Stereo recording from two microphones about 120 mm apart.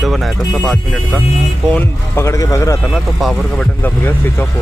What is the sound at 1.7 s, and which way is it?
Speech, 20° left (ahead or behind).